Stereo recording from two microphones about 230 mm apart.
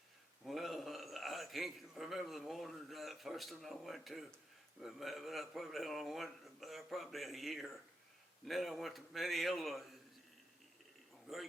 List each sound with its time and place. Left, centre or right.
0.4 s a man's voice: centre
11.3 s a man's voice: centre